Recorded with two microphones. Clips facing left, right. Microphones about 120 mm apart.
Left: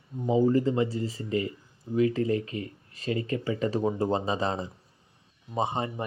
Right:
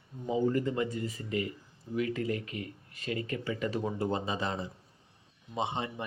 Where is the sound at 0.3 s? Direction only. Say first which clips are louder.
Left 6 dB; 30° left (ahead or behind).